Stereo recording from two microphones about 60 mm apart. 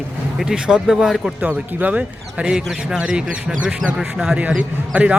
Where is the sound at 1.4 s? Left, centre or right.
Right.